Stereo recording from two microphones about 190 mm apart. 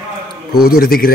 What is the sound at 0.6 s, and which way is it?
Speech, 50° left (ahead or behind).